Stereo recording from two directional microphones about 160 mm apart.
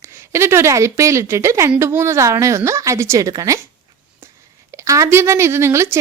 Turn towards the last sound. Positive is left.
turn(degrees=-15)  # may be behind; listen again after turning